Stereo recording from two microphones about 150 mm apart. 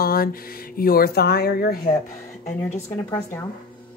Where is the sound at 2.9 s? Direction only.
15° left (ahead or behind).